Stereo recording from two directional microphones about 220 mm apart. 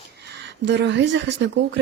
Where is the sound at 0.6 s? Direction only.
50° right (ahead or behind).